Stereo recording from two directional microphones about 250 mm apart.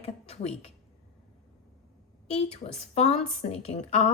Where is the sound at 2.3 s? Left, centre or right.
Left.